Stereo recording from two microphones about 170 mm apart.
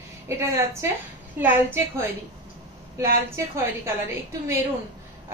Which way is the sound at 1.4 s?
15° right (ahead or behind).